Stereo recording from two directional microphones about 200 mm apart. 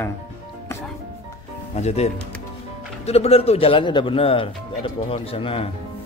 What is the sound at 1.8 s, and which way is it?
Speech, 35° left (ahead or behind).